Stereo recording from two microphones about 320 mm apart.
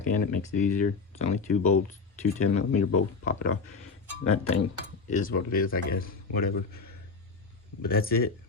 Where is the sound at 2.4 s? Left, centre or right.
Left.